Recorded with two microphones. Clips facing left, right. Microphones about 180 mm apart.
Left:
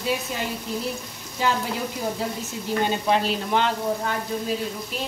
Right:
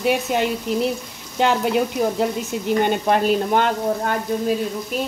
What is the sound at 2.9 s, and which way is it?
Speech, 50° right (ahead or behind).